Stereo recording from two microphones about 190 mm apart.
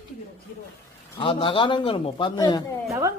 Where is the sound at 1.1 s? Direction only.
25° left (ahead or behind).